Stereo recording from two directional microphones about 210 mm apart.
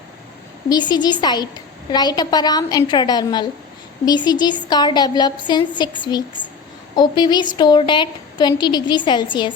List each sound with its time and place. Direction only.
0.7 s a woman's voice: 20° left (ahead or behind)